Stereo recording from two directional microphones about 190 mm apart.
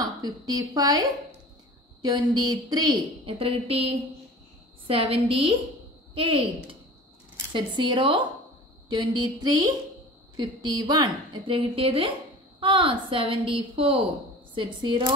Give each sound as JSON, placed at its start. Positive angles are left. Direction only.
{"t": 0.0, "sound": "a woman's voice", "side_deg": -20}